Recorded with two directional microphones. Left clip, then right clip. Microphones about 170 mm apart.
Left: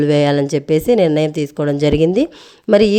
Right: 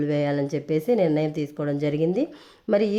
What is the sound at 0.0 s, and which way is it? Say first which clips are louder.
A woman's voice: left 10 dB; 35° left (ahead or behind).